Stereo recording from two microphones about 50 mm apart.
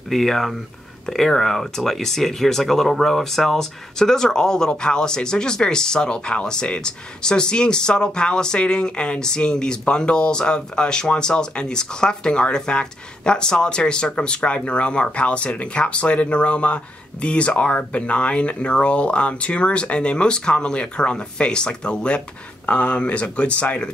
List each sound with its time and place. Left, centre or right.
0.1 s speech: centre; by 23.9 s left